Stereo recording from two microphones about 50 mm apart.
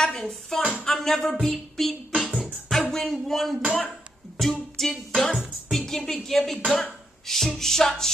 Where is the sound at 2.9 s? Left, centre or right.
Centre.